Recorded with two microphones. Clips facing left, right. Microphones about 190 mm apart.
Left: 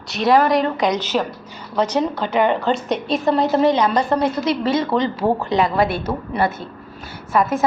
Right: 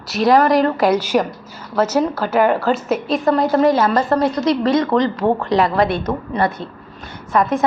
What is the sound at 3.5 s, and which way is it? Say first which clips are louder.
Speech: right 2 dB; 25° left (ahead or behind).